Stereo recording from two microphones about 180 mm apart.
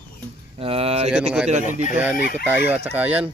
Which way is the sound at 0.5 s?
35° right (ahead or behind).